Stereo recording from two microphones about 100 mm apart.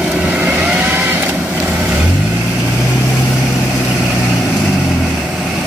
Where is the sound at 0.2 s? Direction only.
15° right (ahead or behind).